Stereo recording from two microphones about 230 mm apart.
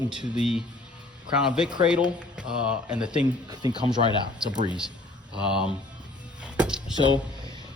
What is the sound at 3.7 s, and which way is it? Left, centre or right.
Speech, centre.